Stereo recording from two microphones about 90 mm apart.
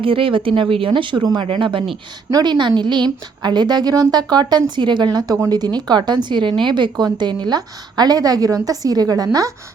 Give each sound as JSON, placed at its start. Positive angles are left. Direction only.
{"t": 0.0, "sound": "speech", "side_deg": -75}
{"t": 1.5, "sound": "speech", "side_deg": -70}
{"t": 2.3, "sound": "a woman's voice", "side_deg": -55}